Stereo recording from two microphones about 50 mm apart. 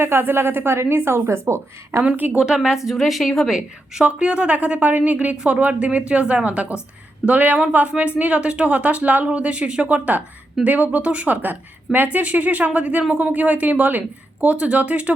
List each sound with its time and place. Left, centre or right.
0.0 s speech: right
2.0 s speech: right
2.8 s a woman's voice: centre
4.0 s speech: right
11.4 s a woman's voice: right